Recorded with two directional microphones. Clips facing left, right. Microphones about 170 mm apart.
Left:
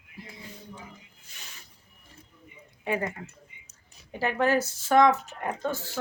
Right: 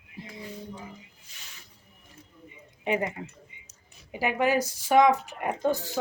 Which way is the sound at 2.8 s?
20° right (ahead or behind).